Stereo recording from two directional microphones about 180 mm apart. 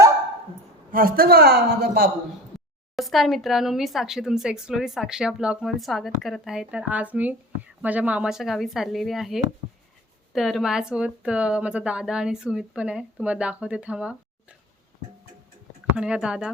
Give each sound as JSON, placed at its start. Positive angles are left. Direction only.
{"t": 0.9, "sound": "a woman's voice", "side_deg": -55}
{"t": 2.9, "sound": "speech", "side_deg": 0}
{"t": 16.0, "sound": "speech", "side_deg": -5}